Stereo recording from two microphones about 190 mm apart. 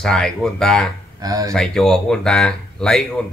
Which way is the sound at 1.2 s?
20° right (ahead or behind).